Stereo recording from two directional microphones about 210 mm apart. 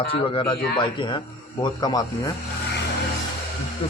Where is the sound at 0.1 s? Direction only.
25° left (ahead or behind).